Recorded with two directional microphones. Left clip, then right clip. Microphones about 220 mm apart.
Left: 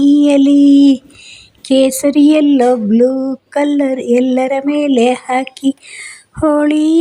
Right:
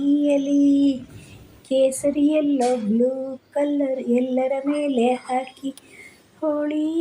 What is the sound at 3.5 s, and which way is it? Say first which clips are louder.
Speech: left 8 dB; 55° left (ahead or behind).